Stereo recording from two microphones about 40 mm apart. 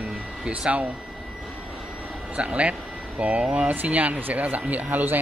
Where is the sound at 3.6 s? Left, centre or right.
Right.